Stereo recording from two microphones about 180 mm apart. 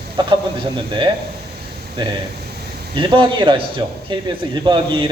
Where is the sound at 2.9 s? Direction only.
25° right (ahead or behind).